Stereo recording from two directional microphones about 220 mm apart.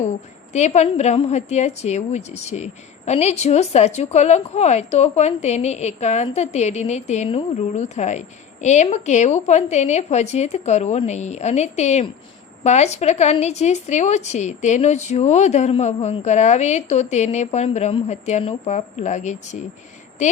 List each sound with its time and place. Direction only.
0.5 s a woman's voice: 30° left (ahead or behind)